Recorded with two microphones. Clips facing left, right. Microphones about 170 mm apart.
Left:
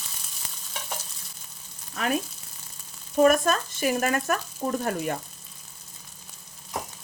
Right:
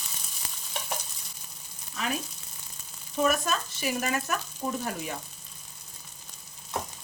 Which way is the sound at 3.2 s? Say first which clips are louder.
Left 7 dB; 50° left (ahead or behind).